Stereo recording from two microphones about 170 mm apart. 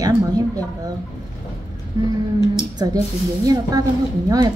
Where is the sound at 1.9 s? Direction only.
20° right (ahead or behind).